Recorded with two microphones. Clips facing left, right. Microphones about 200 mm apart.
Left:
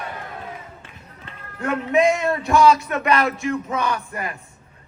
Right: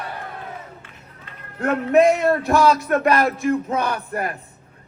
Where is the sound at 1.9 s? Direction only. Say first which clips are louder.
Right 3 dB; 60° right (ahead or behind).